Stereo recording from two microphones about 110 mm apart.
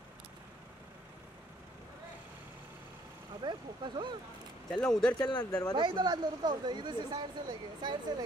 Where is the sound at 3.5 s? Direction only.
45° right (ahead or behind).